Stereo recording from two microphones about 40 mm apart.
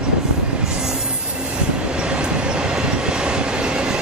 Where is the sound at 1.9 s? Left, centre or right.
Right.